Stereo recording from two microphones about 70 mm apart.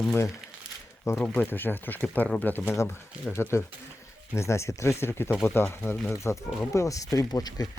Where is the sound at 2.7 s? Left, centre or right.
Left.